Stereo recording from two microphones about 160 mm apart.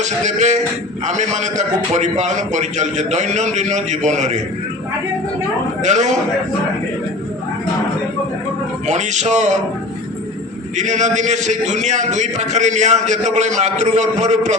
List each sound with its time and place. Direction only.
0.0 s a man's voice: 45° right (ahead or behind)
5.8 s a man's voice: 50° right (ahead or behind)
8.9 s a man's voice: 50° right (ahead or behind)
10.8 s a man's voice: 50° right (ahead or behind)